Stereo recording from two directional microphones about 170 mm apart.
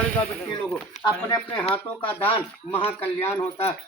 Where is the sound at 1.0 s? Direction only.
25° left (ahead or behind).